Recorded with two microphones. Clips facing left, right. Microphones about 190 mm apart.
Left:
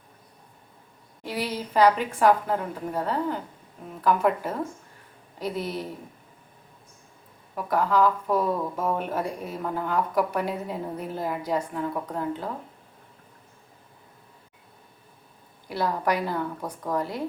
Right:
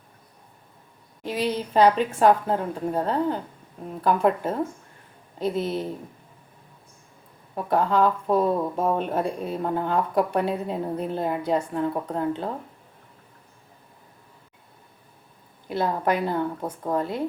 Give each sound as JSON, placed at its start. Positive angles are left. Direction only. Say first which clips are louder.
{"t": 1.2, "sound": "speech", "louder": "right 4 dB", "side_deg": -20}
{"t": 7.5, "sound": "speech", "louder": "right 2 dB", "side_deg": -25}
{"t": 15.6, "sound": "speech", "louder": "right 2 dB", "side_deg": -20}